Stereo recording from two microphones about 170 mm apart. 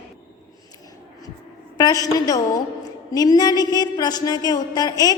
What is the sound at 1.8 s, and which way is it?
A woman's voice, 20° left (ahead or behind).